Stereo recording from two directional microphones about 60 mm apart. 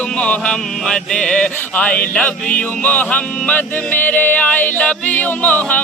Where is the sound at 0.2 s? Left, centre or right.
Centre.